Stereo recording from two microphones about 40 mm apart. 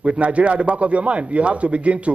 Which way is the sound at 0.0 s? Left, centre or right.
Right.